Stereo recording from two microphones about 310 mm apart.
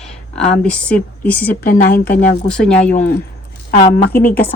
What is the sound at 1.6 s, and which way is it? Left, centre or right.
Speech, left.